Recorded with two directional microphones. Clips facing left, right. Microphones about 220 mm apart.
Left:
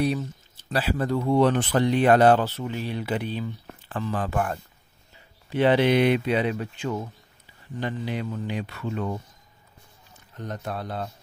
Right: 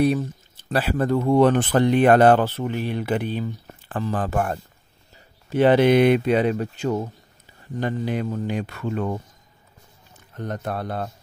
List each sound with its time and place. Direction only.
0.7 s speech: 55° right (ahead or behind)
10.3 s speech: 55° right (ahead or behind)